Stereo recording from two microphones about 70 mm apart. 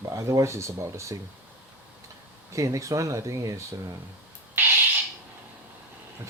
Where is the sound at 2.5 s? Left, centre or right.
Right.